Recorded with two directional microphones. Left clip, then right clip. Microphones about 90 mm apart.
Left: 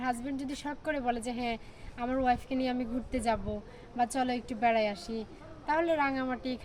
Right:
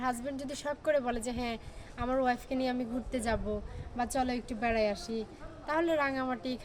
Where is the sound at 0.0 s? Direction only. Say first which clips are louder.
Even; 50° right (ahead or behind).